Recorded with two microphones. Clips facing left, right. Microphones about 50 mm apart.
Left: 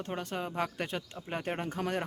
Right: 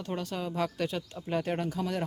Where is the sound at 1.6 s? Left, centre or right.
Left.